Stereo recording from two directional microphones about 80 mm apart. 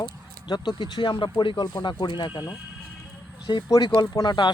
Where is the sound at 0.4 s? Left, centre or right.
Left.